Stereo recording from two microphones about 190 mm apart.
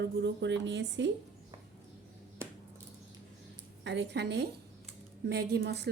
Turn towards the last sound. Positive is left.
turn(degrees=-60)  # may be behind; listen again after turning